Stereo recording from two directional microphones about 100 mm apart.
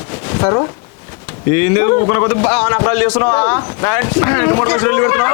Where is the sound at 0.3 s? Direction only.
30° left (ahead or behind).